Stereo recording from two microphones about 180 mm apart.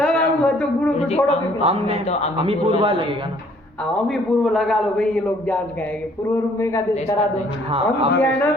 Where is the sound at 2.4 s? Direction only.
30° right (ahead or behind).